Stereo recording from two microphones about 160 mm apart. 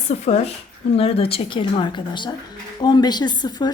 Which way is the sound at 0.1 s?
45° left (ahead or behind).